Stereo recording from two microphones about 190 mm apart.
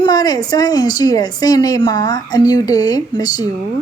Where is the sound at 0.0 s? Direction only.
20° left (ahead or behind).